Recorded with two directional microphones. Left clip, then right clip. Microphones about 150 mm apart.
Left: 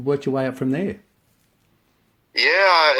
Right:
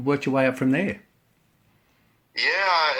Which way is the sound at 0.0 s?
25° left (ahead or behind).